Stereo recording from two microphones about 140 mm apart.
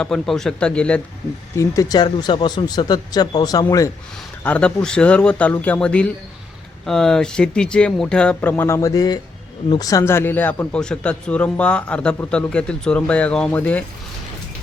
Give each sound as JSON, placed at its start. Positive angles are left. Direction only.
{"t": 0.0, "sound": "a man's voice", "side_deg": 5}
{"t": 1.5, "sound": "speech", "side_deg": 25}
{"t": 4.4, "sound": "a man's voice", "side_deg": 10}